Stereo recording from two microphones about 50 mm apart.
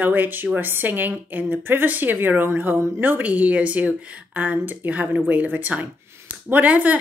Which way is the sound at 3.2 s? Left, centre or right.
Right.